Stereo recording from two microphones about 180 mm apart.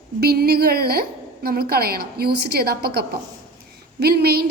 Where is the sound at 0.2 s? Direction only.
60° right (ahead or behind).